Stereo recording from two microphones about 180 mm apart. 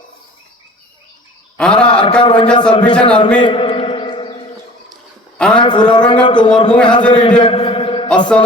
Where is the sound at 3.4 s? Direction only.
30° left (ahead or behind).